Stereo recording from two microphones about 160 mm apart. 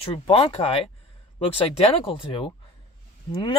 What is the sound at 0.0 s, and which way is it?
Speech, 35° left (ahead or behind).